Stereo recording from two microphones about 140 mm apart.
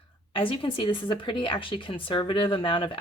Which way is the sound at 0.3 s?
40° left (ahead or behind).